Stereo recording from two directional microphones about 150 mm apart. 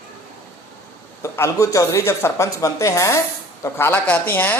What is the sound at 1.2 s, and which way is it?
A woman's voice, 20° left (ahead or behind).